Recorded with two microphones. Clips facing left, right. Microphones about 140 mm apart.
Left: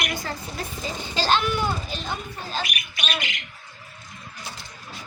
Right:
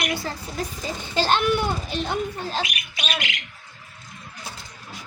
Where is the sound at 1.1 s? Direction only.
55° right (ahead or behind).